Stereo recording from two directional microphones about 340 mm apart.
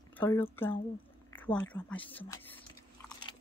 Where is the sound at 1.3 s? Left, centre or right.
Centre.